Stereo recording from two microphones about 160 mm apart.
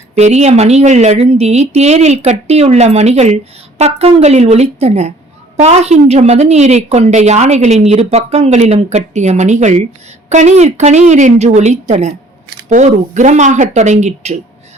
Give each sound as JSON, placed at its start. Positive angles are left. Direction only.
{"t": 0.2, "sound": "a woman's voice", "side_deg": -45}